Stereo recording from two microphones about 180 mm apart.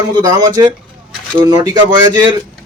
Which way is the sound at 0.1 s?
20° right (ahead or behind).